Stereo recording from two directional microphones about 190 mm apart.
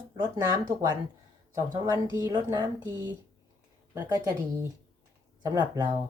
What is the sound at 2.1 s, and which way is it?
Speech, 20° right (ahead or behind).